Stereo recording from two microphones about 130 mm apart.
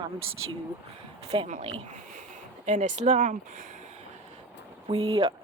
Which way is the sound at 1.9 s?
90° right.